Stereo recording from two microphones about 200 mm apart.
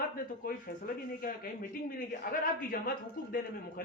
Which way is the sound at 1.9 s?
45° left (ahead or behind).